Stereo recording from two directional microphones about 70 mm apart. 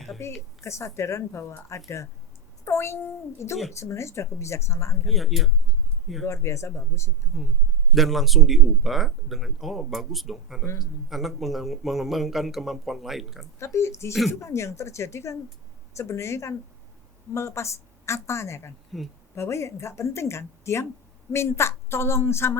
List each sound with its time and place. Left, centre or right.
0.2 s a woman's voice: left
5.0 s a man's voice: centre
6.2 s a woman's voice: left
7.3 s a man's voice: centre
13.6 s a woman's voice: left
14.1 s a man's voice: centre
14.4 s a woman's voice: left
18.9 s a man's voice: centre
19.4 s speech: left